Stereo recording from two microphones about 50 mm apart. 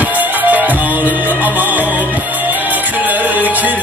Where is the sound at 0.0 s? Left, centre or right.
Right.